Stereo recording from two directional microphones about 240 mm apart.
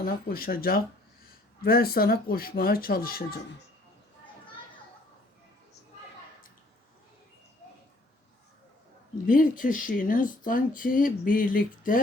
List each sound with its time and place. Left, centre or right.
0.0 s speech: left
9.2 s speech: left